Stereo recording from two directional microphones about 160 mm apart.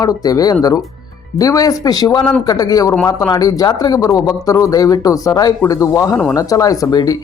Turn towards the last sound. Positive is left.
turn(degrees=25)  # may be behind; listen again after turning